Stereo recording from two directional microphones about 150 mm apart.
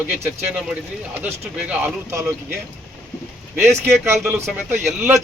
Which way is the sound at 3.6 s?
15° right (ahead or behind).